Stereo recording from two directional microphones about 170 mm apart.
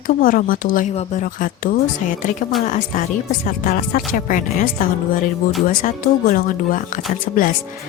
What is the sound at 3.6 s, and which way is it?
Speech, 55° left (ahead or behind).